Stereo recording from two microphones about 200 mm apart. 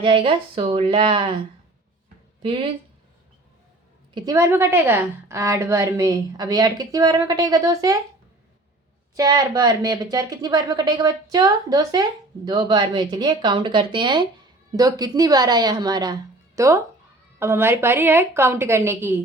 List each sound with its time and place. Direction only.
0.0 s speech: 25° right (ahead or behind)
2.4 s speech: 25° right (ahead or behind)
4.1 s a woman's voice: 15° right (ahead or behind)
9.1 s a woman's voice: 20° right (ahead or behind)